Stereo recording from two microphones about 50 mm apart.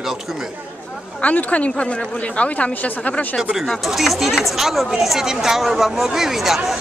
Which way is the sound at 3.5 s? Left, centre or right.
Centre.